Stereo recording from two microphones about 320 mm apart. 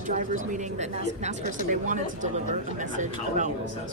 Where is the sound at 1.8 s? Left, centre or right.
Right.